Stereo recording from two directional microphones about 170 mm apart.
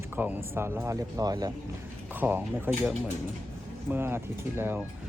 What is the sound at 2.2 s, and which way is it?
Speech, 10° right (ahead or behind).